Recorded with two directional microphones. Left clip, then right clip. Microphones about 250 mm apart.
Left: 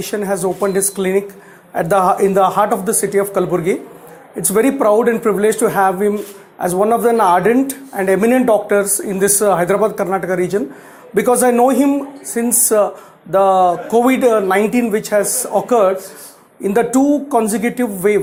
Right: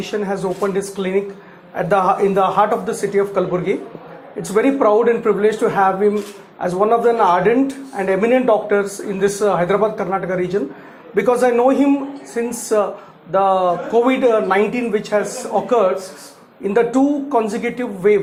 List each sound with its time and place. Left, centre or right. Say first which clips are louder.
0.0 s speech: left 3 dB; left